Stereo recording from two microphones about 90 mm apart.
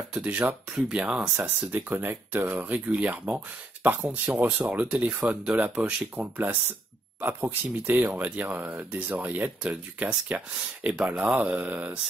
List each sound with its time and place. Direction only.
0.1 s speech: 10° right (ahead or behind)